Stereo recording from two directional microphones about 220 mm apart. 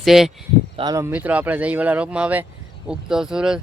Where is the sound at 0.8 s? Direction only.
15° right (ahead or behind).